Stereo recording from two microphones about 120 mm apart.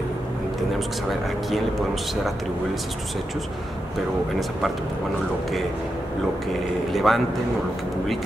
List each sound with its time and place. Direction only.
1.5 s speech: centre (ahead or behind)
6.9 s speech: centre (ahead or behind)